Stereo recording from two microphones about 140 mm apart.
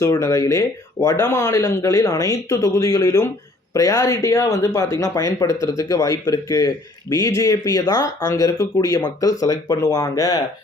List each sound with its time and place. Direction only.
0.0 s speech: 20° left (ahead or behind)